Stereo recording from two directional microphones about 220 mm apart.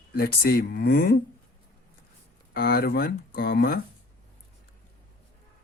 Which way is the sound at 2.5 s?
45° left (ahead or behind).